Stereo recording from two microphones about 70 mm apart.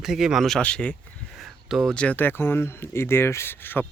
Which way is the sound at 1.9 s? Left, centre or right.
Centre.